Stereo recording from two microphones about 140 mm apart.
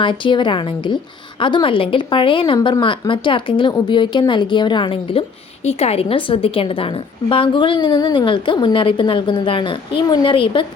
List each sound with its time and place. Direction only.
0.0 s a woman's voice: 35° left (ahead or behind)
5.6 s a woman's voice: 50° left (ahead or behind)